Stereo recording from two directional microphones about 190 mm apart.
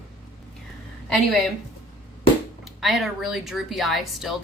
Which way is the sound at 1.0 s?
Centre (ahead or behind).